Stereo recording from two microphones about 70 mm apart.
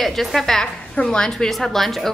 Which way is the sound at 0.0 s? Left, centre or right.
Centre.